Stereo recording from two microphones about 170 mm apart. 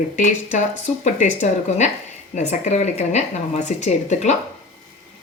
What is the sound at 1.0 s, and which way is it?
Speech, 45° left (ahead or behind).